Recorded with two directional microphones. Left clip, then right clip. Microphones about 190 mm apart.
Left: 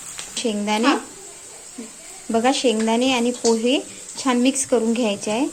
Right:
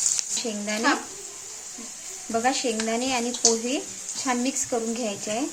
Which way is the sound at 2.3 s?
20° left (ahead or behind).